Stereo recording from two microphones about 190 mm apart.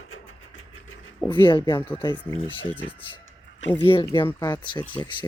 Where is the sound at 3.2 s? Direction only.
75° left (ahead or behind).